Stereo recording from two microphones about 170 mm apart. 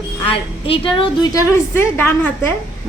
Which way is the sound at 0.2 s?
30° left (ahead or behind).